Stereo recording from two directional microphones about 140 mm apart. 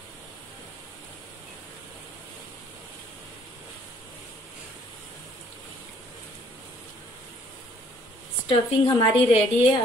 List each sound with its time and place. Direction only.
8.5 s a woman's voice: 40° left (ahead or behind)